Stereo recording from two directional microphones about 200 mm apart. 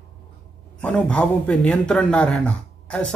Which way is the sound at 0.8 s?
5° left (ahead or behind).